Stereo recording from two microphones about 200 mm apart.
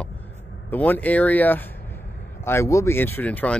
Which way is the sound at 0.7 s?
10° left (ahead or behind).